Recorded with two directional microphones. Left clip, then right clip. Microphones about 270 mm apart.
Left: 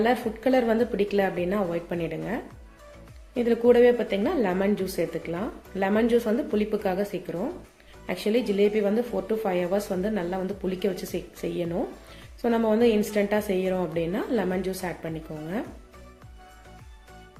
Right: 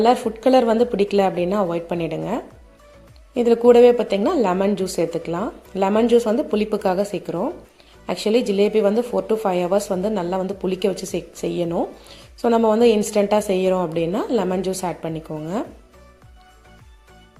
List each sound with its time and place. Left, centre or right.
0.4 s a woman's voice: right